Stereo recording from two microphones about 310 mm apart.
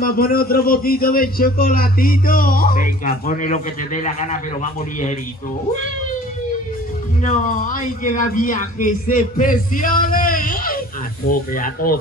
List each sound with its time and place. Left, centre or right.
0.0 s a man's voice: left
7.2 s a man's voice: left